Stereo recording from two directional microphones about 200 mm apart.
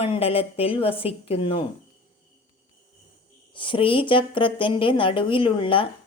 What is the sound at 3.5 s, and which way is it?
A woman's voice, 25° left (ahead or behind).